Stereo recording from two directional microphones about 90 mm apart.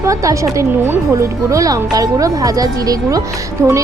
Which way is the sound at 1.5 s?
40° right (ahead or behind).